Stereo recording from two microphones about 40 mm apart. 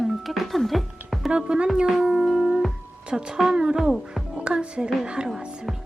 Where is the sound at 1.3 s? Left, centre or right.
Right.